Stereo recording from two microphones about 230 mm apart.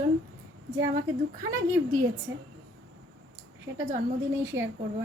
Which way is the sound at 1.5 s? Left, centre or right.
Centre.